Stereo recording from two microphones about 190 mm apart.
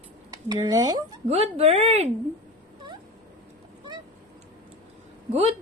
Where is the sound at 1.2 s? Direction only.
35° right (ahead or behind).